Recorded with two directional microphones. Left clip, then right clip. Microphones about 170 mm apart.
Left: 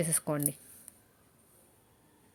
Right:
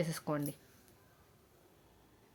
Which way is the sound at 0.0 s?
30° left (ahead or behind).